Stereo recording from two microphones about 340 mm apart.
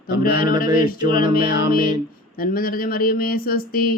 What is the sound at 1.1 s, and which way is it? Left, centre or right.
Speech, left.